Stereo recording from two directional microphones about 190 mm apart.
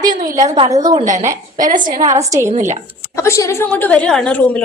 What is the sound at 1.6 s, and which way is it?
Speech, 45° right (ahead or behind).